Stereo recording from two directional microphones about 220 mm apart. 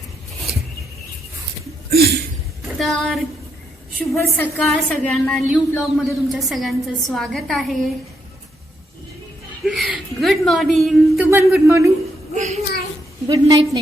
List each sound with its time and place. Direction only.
1.9 s a sound: 45° right (ahead or behind)
2.7 s a woman's voice: centre (ahead or behind)
9.6 s a woman's voice: centre (ahead or behind)
11.3 s speech: 10° right (ahead or behind)
12.3 s a sound: 30° right (ahead or behind)
13.2 s speech: 15° right (ahead or behind)